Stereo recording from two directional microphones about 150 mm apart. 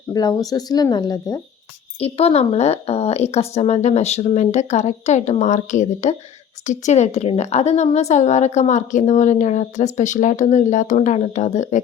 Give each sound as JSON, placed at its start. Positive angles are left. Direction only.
{"t": 0.1, "sound": "speech", "side_deg": 25}
{"t": 2.0, "sound": "a woman's voice", "side_deg": 40}